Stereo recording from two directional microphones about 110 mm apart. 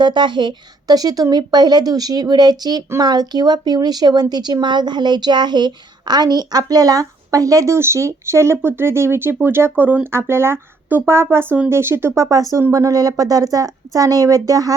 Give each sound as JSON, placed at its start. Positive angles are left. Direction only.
{"t": 0.0, "sound": "speech", "side_deg": -45}